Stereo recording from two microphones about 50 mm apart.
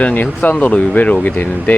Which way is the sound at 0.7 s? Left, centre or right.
Left.